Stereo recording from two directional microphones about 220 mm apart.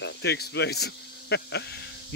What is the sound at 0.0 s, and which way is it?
Speech, 50° left (ahead or behind).